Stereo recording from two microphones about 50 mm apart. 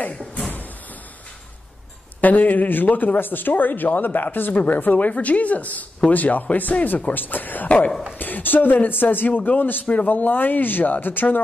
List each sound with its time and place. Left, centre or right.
0.0 s slam: left
2.2 s a man's voice: left